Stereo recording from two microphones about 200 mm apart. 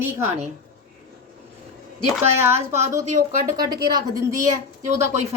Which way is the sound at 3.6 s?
20° right (ahead or behind).